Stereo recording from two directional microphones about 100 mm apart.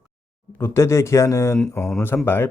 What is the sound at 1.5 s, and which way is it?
Speech, 5° left (ahead or behind).